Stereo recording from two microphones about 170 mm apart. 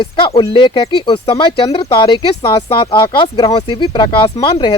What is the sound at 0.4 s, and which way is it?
Speech, 30° left (ahead or behind).